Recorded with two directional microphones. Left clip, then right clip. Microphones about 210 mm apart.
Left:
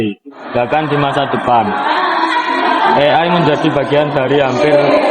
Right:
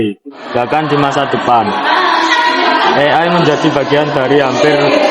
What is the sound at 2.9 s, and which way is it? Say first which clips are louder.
A man's voice: right 1 dB; 15° right (ahead or behind).